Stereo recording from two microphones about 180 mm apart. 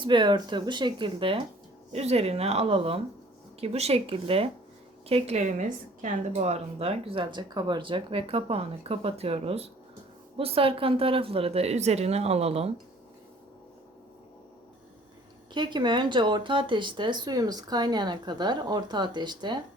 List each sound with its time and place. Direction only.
0.0 s a woman's voice: 25° right (ahead or behind)
15.5 s speech: 25° right (ahead or behind)